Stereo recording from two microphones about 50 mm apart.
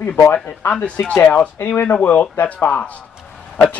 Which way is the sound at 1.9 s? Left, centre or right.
Left.